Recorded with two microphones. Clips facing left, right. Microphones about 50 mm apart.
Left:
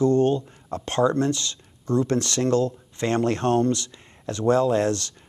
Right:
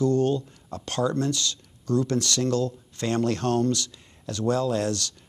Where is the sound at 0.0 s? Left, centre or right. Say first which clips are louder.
Left 3 dB; left.